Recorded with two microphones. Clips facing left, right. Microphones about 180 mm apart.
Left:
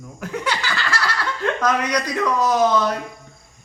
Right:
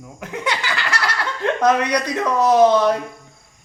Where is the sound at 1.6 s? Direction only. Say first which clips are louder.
Right 5 dB; 25° right (ahead or behind).